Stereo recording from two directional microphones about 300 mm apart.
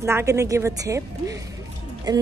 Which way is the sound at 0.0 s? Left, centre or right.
Centre.